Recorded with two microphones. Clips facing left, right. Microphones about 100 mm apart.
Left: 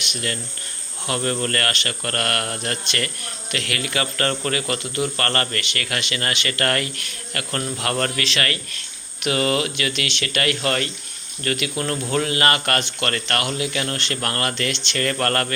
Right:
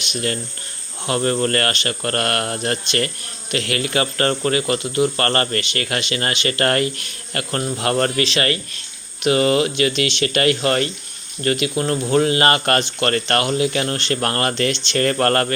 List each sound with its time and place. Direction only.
0.1 s speech: 30° right (ahead or behind)